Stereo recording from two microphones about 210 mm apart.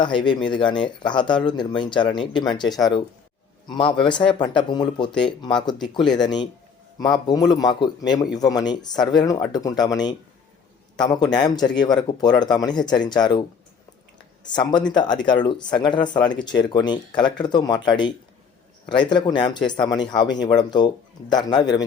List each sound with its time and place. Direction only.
0.0 s speech: 20° left (ahead or behind)
11.3 s speech: 20° left (ahead or behind)
14.4 s speech: 20° left (ahead or behind)